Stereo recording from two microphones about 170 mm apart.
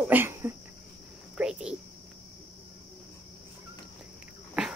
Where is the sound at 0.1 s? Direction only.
15° right (ahead or behind).